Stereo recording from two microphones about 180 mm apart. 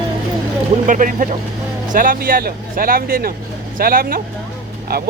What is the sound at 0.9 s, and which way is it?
Speech, 45° right (ahead or behind).